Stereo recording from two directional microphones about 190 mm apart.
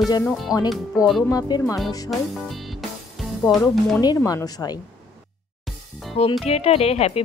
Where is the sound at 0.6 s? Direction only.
20° left (ahead or behind).